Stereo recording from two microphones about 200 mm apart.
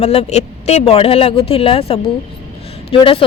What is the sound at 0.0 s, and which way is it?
Speech, 30° left (ahead or behind).